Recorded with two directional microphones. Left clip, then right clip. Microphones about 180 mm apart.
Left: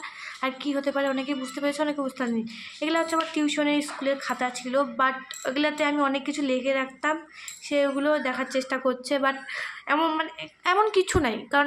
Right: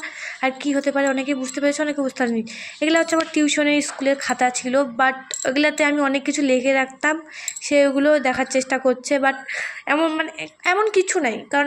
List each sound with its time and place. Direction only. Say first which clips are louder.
0.4 s a woman's voice: right 6 dB; 20° right (ahead or behind)